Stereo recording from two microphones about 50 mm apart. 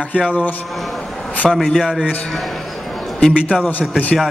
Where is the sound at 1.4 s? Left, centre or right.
Centre.